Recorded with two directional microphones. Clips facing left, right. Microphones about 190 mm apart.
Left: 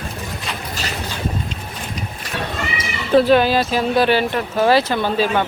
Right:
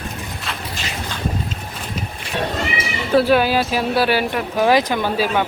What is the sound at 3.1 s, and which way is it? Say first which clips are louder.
Speech: left 2 dB; 10° right (ahead or behind).